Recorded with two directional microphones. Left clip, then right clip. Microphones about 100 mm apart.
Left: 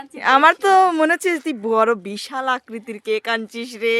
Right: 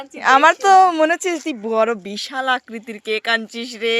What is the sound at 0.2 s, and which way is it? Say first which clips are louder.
Speech: right 1 dB; 40° left (ahead or behind).